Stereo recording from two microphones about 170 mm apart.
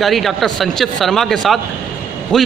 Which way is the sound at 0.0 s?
Centre (ahead or behind).